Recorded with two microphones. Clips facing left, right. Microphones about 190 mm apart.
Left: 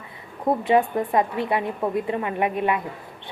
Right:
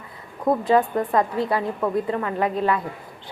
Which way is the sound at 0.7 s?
20° left (ahead or behind).